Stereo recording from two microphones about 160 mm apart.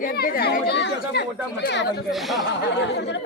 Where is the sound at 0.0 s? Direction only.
70° left (ahead or behind); by 1.9 s 90° left.